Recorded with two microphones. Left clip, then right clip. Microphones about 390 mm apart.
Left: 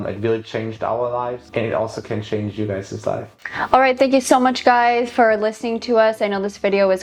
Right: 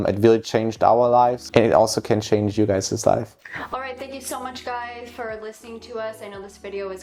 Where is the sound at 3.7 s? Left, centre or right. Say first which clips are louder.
Left 19 dB; left.